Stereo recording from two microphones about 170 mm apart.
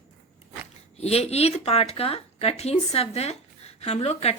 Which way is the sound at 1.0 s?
35° left (ahead or behind).